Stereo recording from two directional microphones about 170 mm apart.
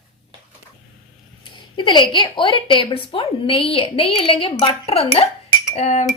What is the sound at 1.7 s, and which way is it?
Speech, 30° left (ahead or behind).